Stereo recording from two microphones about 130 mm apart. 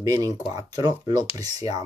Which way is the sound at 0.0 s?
25° right (ahead or behind).